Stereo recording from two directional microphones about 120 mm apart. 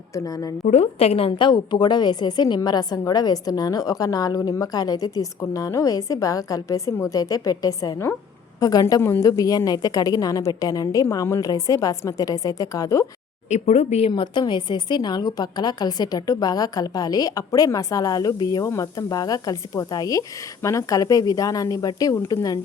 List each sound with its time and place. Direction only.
0.1 s a woman's voice: 30° left (ahead or behind)
0.6 s a woman's voice: 70° left (ahead or behind); by 1.5 s 55° left (ahead or behind)
1.5 s a woman's voice: 40° left (ahead or behind)
9.0 s a woman's voice: 20° left (ahead or behind)
9.4 s a woman's voice: 30° left (ahead or behind)
13.5 s speech: 70° left (ahead or behind)
14.1 s a woman's voice: 35° left (ahead or behind)